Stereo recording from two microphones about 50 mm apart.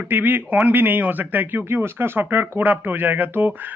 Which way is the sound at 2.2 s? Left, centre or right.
Right.